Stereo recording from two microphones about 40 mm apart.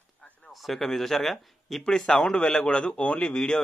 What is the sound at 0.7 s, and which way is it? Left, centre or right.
Speech, centre.